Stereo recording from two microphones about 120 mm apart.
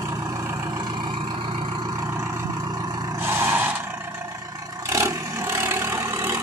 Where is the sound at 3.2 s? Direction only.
20° right (ahead or behind).